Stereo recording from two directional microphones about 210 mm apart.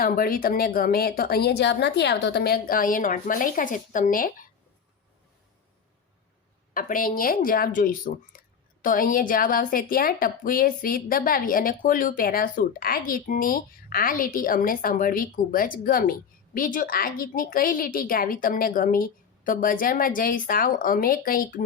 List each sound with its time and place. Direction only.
0.0 s speech: 45° left (ahead or behind)
6.7 s speech: 40° left (ahead or behind)